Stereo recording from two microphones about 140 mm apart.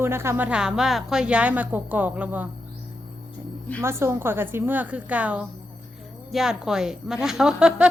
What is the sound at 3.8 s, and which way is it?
A woman's voice, 20° right (ahead or behind).